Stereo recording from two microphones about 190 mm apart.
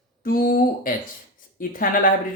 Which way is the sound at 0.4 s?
50° left (ahead or behind).